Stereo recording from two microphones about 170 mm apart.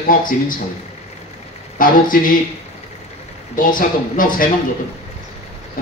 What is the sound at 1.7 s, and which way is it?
Speech, 55° left (ahead or behind).